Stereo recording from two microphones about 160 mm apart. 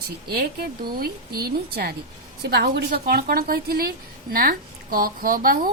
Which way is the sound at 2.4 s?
90° right.